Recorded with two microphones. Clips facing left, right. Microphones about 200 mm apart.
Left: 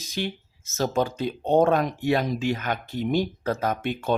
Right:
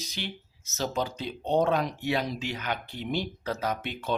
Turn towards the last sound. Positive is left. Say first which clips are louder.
# left 5 dB
turn(degrees=50)  # may be behind; listen again after turning